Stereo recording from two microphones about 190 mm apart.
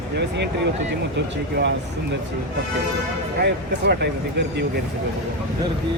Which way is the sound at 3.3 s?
60° right (ahead or behind).